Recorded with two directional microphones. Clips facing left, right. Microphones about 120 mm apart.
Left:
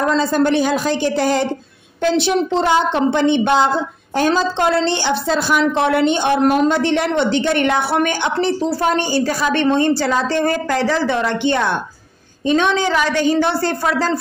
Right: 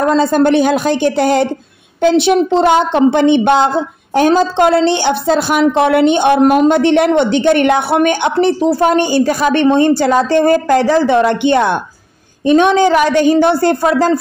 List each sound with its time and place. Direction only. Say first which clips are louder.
0.0 s a woman's voice: right 5 dB; 55° right (ahead or behind)